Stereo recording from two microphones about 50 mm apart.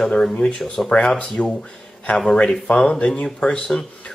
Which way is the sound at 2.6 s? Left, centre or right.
Centre.